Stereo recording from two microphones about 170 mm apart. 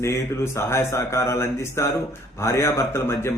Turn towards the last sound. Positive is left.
turn(degrees=15)  # may be behind; listen again after turning